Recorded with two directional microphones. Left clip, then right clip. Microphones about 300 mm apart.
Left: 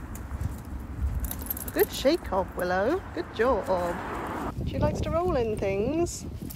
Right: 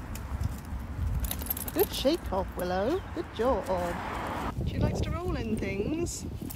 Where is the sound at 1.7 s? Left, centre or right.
Centre.